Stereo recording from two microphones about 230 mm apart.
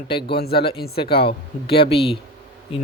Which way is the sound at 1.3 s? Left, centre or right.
Left.